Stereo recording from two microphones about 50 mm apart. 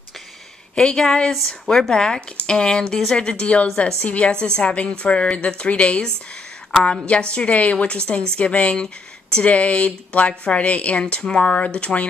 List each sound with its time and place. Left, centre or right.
0.7 s a woman's voice: centre